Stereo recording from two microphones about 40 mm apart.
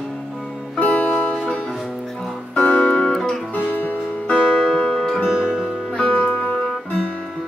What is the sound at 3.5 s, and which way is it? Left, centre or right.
Music, left.